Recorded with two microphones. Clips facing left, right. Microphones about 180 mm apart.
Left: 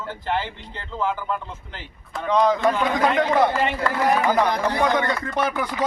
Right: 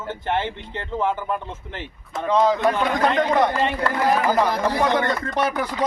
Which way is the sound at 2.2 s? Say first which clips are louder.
Even; 5° right (ahead or behind).